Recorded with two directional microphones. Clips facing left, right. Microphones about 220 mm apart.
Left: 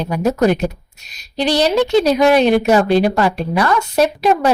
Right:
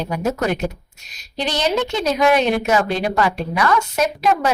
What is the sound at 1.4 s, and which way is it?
A woman's voice, 35° left (ahead or behind).